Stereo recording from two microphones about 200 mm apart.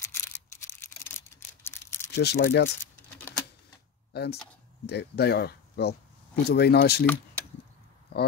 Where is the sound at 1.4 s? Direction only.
10° left (ahead or behind).